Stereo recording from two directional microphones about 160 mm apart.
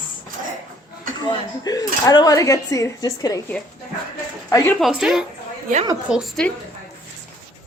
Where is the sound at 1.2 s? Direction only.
25° left (ahead or behind).